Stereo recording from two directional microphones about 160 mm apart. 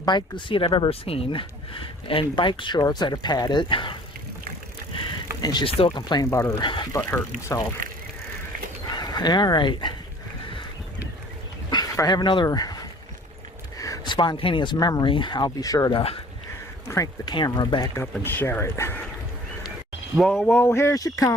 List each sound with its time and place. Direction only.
0.0 s speech: 30° left (ahead or behind)
5.4 s speech: 25° left (ahead or behind)
6.7 s speech: 30° left (ahead or behind)
7.1 s speech: 15° left (ahead or behind)
7.8 s bicycle: 60° right (ahead or behind)
8.9 s speech: 25° left (ahead or behind)
11.7 s a sound: 25° left (ahead or behind)
13.7 s speech: 20° left (ahead or behind)
18.2 s speech: 15° left (ahead or behind)
20.1 s speech: centre (ahead or behind)
20.5 s speech: 15° left (ahead or behind)